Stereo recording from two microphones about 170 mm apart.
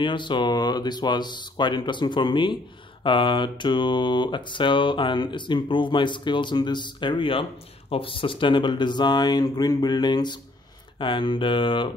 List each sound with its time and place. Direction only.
0.0 s mantra: 30° left (ahead or behind)